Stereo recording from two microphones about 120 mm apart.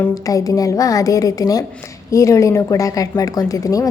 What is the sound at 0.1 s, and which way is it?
A woman's voice, 30° left (ahead or behind).